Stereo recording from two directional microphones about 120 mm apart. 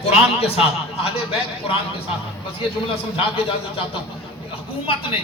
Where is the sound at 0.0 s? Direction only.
55° left (ahead or behind).